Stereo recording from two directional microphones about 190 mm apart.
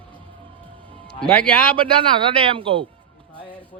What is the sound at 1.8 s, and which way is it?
A man's voice, 25° right (ahead or behind).